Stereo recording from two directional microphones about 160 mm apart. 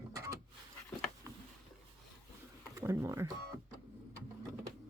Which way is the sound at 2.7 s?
20° right (ahead or behind).